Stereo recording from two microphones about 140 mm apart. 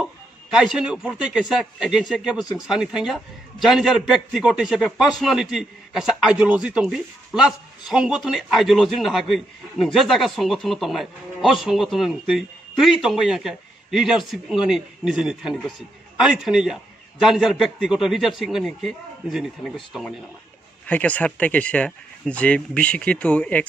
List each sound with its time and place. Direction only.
0.0 s a man's voice: 5° right (ahead or behind)